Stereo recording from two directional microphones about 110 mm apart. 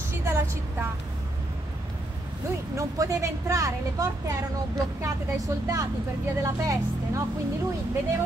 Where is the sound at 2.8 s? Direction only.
30° right (ahead or behind).